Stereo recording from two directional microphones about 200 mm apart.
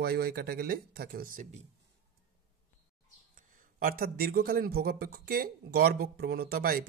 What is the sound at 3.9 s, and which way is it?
Speech, 45° right (ahead or behind).